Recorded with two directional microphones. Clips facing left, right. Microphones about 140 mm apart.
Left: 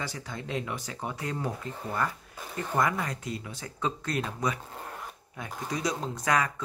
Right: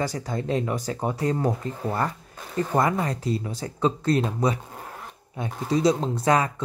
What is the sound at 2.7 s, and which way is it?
Speech, 35° right (ahead or behind).